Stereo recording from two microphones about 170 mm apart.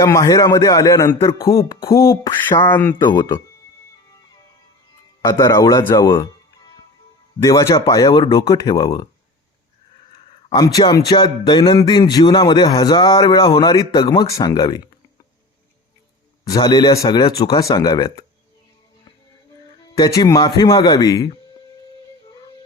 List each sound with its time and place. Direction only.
0.0 s a man's voice: 20° left (ahead or behind)
1.5 s a man's voice: 30° left (ahead or behind); by 2.9 s 10° left (ahead or behind)
3.0 s a man's voice: 25° left (ahead or behind)
5.2 s a man's voice: 20° left (ahead or behind)
10.5 s a man's voice: 20° left (ahead or behind)
16.4 s a man's voice: 25° left (ahead or behind)
19.8 s a man's voice: 20° left (ahead or behind)